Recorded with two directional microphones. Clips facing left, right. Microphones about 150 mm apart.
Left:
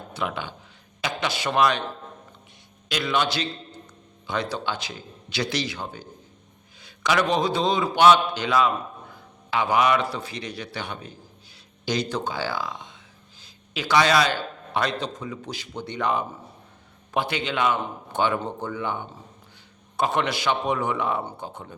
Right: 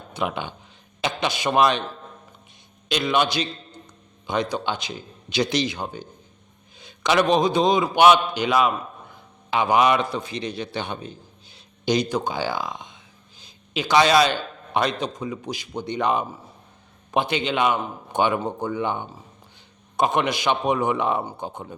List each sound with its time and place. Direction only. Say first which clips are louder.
0.1 s speech: right 3 dB; 20° right (ahead or behind)
2.9 s a man's voice: right 3 dB; 20° right (ahead or behind)